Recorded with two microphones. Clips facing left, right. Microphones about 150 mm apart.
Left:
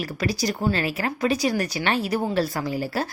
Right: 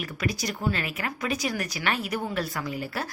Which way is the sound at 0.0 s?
35° left (ahead or behind).